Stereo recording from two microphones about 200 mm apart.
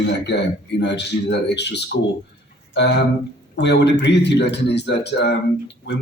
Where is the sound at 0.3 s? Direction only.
60° left (ahead or behind).